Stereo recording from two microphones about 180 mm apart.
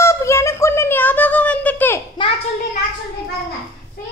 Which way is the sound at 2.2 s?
25° left (ahead or behind).